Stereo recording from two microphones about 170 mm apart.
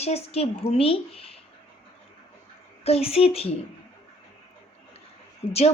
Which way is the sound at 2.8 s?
35° left (ahead or behind).